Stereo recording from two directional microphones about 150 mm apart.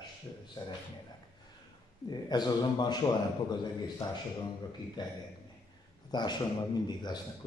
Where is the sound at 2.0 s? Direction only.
30° left (ahead or behind).